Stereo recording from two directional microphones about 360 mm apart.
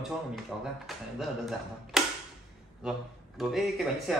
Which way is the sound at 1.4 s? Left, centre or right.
Centre.